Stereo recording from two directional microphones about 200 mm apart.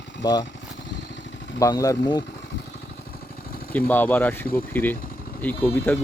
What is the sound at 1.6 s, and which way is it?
Speech, 15° left (ahead or behind).